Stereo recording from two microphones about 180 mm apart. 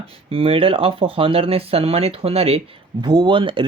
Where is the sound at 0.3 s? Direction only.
30° right (ahead or behind).